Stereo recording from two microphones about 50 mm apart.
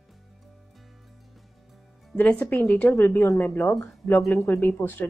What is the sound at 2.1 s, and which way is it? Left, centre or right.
Speech, left.